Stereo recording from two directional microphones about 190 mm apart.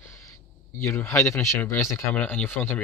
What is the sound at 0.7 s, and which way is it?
Speech, 10° left (ahead or behind).